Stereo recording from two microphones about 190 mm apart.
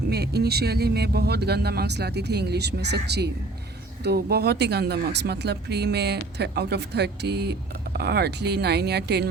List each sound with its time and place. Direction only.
0.1 s speech: 55° right (ahead or behind)